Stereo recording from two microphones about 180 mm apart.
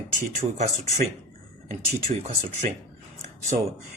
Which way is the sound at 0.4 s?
20° right (ahead or behind).